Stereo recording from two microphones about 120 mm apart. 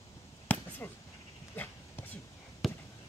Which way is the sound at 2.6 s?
Centre (ahead or behind).